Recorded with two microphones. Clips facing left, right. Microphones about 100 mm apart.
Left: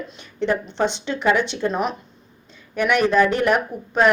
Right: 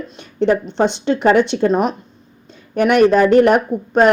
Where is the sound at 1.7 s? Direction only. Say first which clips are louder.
Right 6 dB; 40° right (ahead or behind).